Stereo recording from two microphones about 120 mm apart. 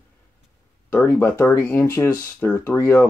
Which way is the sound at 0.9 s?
15° left (ahead or behind).